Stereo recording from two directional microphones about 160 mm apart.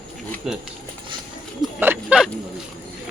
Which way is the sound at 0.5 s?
Centre (ahead or behind).